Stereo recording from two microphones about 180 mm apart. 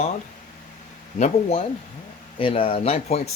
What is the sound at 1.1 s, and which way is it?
Speech, 40° left (ahead or behind).